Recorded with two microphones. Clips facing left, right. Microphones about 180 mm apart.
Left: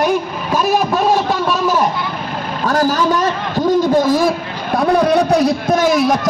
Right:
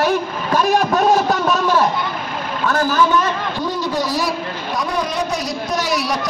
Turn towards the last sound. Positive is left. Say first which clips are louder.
# left 7 dB
turn(degrees=50)  # may be behind; listen again after turning